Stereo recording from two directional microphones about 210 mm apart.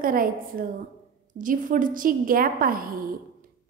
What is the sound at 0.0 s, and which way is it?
A woman's voice, 40° right (ahead or behind).